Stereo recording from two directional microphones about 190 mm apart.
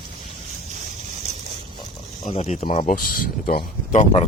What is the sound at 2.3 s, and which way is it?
Speech, 35° left (ahead or behind).